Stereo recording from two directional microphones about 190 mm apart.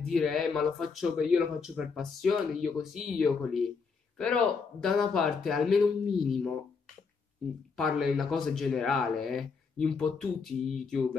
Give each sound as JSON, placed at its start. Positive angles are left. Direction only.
{"t": 0.1, "sound": "speech", "side_deg": 0}
{"t": 7.7, "sound": "speech", "side_deg": 0}